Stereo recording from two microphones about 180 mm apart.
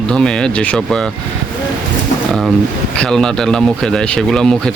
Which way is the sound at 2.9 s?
5° left (ahead or behind).